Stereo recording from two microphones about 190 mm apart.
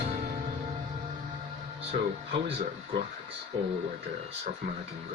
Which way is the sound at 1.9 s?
30° right (ahead or behind).